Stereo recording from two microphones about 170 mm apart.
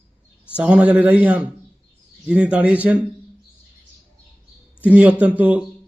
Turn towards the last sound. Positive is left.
turn(degrees=-10)  # may be behind; listen again after turning